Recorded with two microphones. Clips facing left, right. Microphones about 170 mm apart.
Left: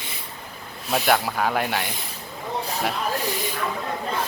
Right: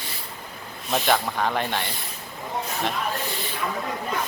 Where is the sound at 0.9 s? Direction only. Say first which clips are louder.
Left 1 dB; 5° left (ahead or behind).